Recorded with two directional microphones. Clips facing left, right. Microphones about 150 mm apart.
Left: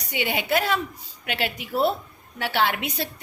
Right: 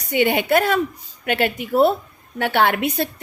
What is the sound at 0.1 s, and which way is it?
A woman's voice, 50° right (ahead or behind).